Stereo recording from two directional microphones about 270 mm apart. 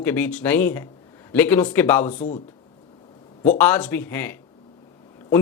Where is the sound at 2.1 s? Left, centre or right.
Left.